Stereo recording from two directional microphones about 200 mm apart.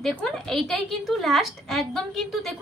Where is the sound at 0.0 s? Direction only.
5° left (ahead or behind).